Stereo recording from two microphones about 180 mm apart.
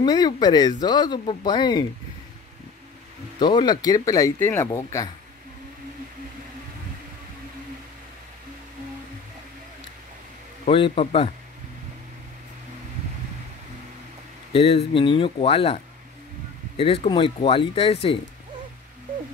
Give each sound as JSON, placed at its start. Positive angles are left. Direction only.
{"t": 0.0, "sound": "speech", "side_deg": 25}
{"t": 3.3, "sound": "speech", "side_deg": 25}
{"t": 10.6, "sound": "speech", "side_deg": 30}
{"t": 14.5, "sound": "speech", "side_deg": 30}